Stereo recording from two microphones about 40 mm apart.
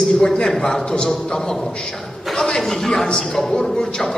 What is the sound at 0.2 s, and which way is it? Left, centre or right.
A woman's voice, centre.